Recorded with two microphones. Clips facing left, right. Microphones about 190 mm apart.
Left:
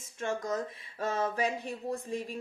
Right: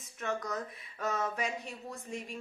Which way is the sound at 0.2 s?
30° left (ahead or behind).